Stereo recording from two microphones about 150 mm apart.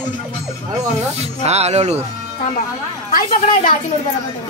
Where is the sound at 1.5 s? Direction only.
45° right (ahead or behind).